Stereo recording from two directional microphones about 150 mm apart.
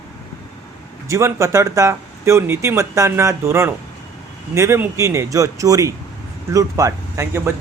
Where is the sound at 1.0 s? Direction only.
20° right (ahead or behind).